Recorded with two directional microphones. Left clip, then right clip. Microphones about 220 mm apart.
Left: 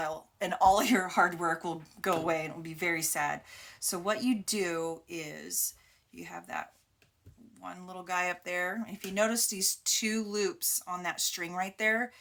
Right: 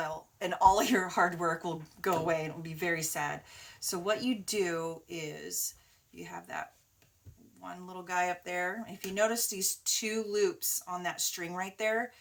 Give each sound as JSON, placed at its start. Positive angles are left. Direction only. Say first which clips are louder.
{"t": 0.0, "sound": "speech", "louder": "left 1 dB", "side_deg": 30}